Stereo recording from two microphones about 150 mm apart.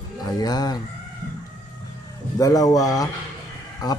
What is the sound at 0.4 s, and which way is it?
Speech, 25° left (ahead or behind).